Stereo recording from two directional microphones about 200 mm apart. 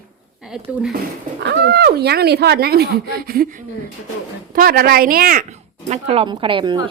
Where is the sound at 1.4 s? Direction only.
55° right (ahead or behind).